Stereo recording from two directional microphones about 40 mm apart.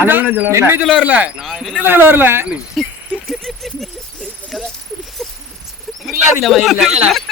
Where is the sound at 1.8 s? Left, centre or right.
Right.